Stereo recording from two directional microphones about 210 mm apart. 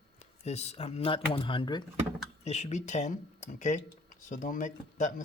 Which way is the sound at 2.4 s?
35° left (ahead or behind).